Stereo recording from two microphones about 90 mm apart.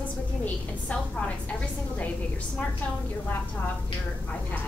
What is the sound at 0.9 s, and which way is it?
Speech, 15° left (ahead or behind).